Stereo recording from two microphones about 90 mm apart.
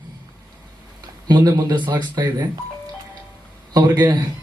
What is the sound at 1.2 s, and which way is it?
A man's voice, 50° right (ahead or behind).